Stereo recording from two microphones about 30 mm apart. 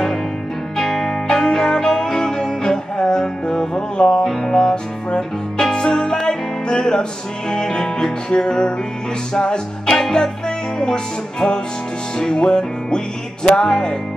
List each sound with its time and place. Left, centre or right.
0.7 s music: centre